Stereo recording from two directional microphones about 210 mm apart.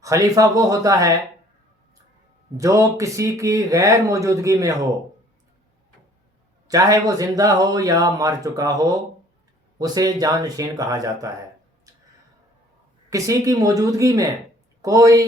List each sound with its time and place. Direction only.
0.0 s speech: 15° right (ahead or behind)
2.6 s speech: 15° right (ahead or behind)
6.7 s speech: 15° right (ahead or behind)
11.9 s a sound: 15° right (ahead or behind)
13.1 s speech: 15° right (ahead or behind)